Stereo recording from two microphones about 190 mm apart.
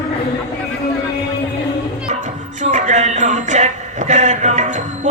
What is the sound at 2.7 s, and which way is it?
Music, 40° right (ahead or behind).